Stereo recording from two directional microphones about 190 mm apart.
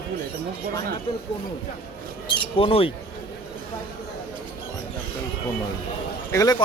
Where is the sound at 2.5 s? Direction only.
30° left (ahead or behind).